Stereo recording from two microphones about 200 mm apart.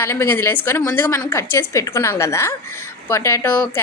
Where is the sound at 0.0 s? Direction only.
15° left (ahead or behind).